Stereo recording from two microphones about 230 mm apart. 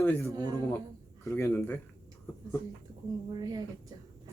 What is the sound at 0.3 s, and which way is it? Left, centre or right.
Speech, centre.